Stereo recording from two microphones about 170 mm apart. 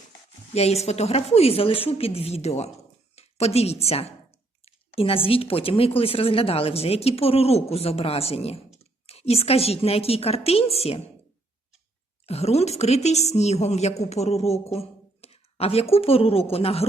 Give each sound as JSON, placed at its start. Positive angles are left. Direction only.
{"t": 0.5, "sound": "a woman's voice", "side_deg": 40}
{"t": 12.2, "sound": "a woman's voice", "side_deg": 40}